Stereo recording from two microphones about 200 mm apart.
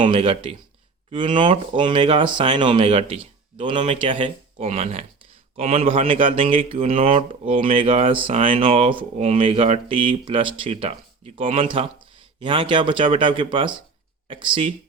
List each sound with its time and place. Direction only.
0.0 s speech: 25° right (ahead or behind)